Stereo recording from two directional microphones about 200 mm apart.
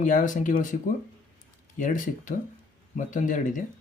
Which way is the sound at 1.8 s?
40° left (ahead or behind).